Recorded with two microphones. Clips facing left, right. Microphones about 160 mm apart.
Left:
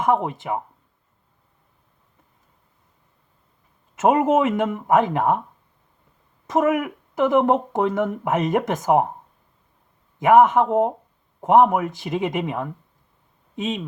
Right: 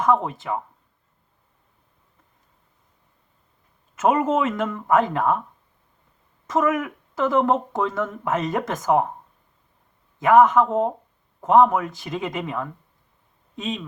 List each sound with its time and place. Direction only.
0.0 s speech: 20° left (ahead or behind)
4.0 s speech: 20° left (ahead or behind)
6.5 s speech: 20° left (ahead or behind)
10.2 s speech: 20° left (ahead or behind)